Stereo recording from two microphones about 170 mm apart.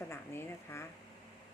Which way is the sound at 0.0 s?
15° left (ahead or behind).